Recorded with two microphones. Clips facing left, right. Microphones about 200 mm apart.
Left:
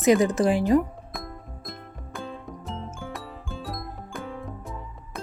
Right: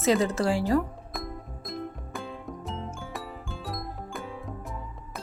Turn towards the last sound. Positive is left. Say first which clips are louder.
# left 2 dB
turn(degrees=0)  # may be behind; listen again after turning